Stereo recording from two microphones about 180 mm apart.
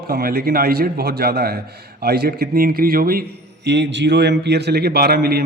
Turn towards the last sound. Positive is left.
turn(degrees=-60)  # may be behind; listen again after turning